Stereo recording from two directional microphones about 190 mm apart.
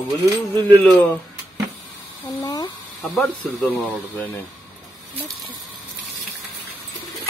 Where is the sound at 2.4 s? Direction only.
20° left (ahead or behind).